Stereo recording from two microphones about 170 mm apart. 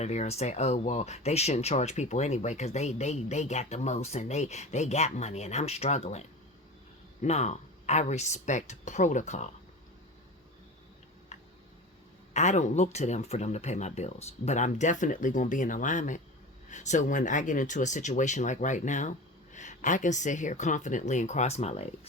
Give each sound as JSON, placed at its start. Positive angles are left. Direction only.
{"t": 0.0, "sound": "speech", "side_deg": 40}
{"t": 11.3, "sound": "tick", "side_deg": 45}
{"t": 12.3, "sound": "speech", "side_deg": 45}